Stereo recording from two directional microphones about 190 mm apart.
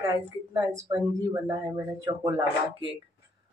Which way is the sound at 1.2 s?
15° right (ahead or behind).